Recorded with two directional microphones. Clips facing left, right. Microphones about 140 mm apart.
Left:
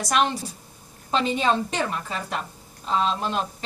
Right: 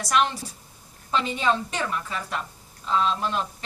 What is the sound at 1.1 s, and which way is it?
A woman's voice, 25° left (ahead or behind).